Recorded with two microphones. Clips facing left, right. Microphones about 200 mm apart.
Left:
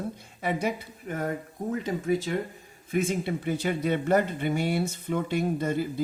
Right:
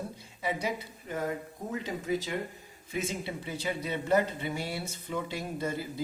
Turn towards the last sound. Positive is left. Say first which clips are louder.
# left 7 dB
turn(degrees=55)  # may be behind; listen again after turning